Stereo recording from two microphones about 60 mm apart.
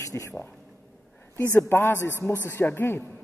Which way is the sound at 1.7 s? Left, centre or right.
Left.